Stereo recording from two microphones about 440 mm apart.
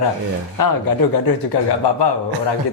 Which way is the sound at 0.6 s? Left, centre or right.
Left.